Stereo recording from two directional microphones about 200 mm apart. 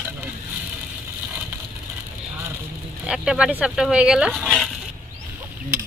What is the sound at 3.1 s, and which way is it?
Speech, 5° right (ahead or behind).